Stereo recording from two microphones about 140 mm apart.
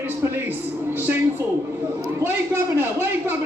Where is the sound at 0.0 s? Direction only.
15° right (ahead or behind).